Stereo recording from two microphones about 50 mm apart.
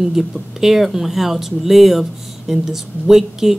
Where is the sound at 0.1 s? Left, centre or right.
Centre.